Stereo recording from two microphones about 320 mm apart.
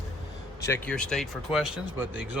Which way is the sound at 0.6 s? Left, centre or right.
Centre.